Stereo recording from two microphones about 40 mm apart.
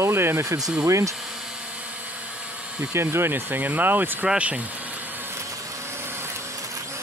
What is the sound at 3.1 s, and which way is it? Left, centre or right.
Speech, right.